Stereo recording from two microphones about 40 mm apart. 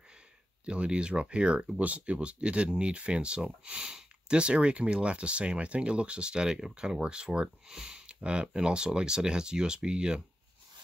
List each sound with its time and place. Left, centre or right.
0.7 s speech: right
7.6 s speech: centre
8.1 s speech: right